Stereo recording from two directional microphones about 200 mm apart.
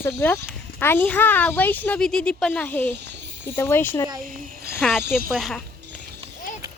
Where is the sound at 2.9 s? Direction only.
60° right (ahead or behind).